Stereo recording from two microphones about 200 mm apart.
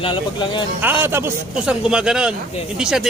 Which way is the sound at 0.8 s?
10° right (ahead or behind).